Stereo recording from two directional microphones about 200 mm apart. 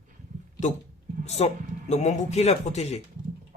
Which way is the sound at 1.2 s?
35° left (ahead or behind).